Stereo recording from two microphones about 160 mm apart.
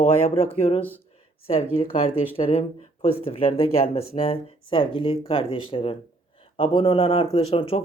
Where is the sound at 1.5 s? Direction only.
40° left (ahead or behind).